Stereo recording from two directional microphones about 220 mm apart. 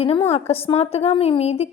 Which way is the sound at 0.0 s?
25° left (ahead or behind).